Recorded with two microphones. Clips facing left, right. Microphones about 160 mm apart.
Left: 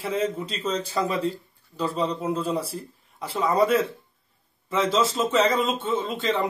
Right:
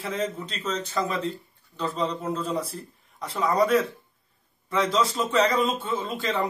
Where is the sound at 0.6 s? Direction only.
30° left (ahead or behind).